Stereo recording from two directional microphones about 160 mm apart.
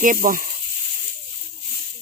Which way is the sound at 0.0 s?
55° right (ahead or behind).